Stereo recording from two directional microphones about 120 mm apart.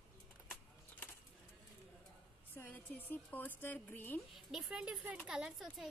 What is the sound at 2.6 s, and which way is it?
Speech, 15° left (ahead or behind).